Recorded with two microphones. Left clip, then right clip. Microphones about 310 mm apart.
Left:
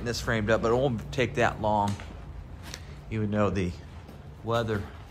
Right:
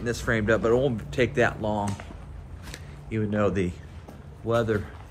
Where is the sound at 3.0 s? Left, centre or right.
Centre.